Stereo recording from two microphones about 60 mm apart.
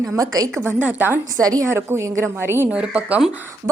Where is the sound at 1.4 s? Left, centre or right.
Right.